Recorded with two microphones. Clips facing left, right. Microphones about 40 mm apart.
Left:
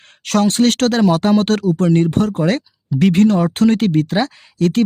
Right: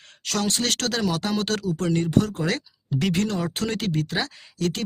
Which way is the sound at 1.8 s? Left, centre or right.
Left.